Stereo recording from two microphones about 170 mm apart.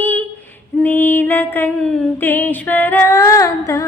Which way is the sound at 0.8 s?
10° left (ahead or behind).